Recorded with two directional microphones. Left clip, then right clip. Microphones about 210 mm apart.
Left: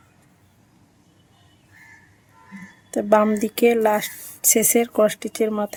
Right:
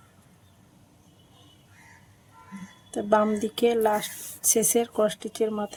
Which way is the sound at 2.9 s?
45° left (ahead or behind).